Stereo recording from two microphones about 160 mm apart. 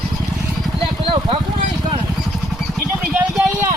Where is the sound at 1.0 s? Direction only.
35° right (ahead or behind).